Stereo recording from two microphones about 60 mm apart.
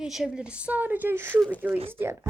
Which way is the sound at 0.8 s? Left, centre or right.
Right.